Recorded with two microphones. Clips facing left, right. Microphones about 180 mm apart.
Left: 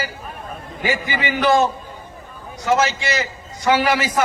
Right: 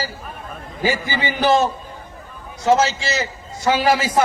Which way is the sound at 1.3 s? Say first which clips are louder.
Even; 25° right (ahead or behind).